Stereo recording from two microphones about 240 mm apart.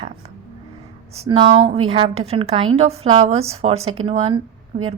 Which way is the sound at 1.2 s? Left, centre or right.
Centre.